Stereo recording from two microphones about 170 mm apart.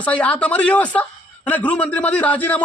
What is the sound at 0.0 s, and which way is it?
A man's voice, 5° left (ahead or behind).